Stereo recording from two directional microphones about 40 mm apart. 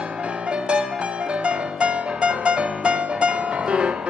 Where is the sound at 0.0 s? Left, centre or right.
Right.